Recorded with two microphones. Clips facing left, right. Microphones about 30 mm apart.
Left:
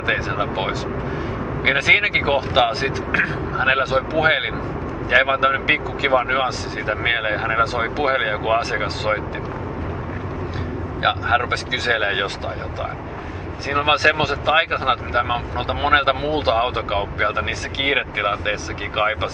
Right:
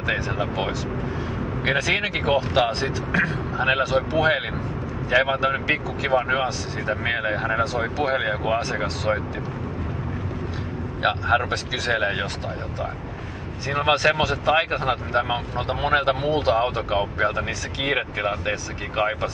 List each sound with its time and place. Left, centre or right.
0.0 s speech: left
3.6 s speech: centre
3.9 s speech: left
11.0 s speech: centre
11.3 s speech: left
13.7 s speech: centre